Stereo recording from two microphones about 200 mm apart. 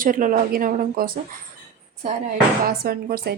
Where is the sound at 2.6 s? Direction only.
50° right (ahead or behind).